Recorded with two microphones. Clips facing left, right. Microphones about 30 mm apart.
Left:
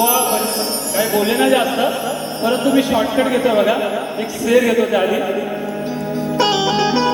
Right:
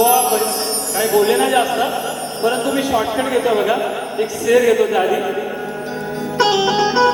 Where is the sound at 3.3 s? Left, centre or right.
Centre.